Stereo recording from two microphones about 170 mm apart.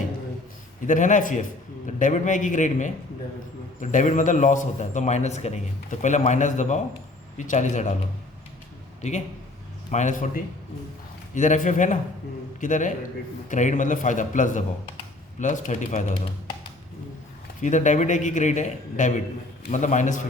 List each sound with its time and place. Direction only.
0.9 s a man's voice: 50° left (ahead or behind)
9.0 s a man's voice: 40° left (ahead or behind)
17.6 s a man's voice: 45° left (ahead or behind)